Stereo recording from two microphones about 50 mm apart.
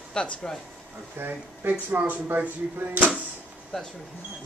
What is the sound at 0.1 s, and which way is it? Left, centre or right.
Speech, centre.